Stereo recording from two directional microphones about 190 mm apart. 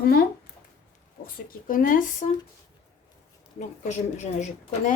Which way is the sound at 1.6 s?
45° left (ahead or behind).